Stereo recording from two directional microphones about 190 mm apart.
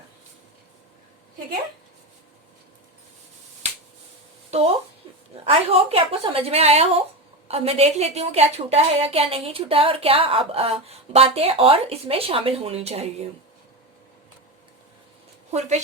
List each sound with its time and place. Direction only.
4.5 s a woman's voice: 35° right (ahead or behind)